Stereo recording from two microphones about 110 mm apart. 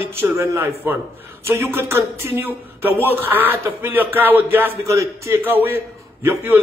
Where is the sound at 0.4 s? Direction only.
25° right (ahead or behind).